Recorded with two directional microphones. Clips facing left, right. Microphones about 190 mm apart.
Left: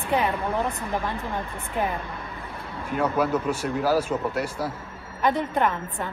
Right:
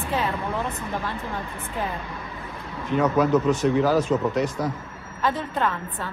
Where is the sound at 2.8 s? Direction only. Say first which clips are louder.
Right 3 dB; 10° left (ahead or behind).